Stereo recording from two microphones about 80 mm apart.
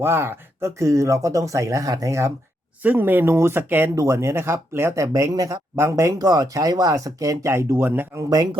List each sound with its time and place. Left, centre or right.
0.0 s speech: right
2.8 s speech: right
3.9 s speech: right
6.2 s speech: right